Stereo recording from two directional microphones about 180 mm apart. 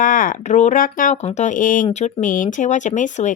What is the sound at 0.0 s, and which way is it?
A woman's voice, 50° left (ahead or behind).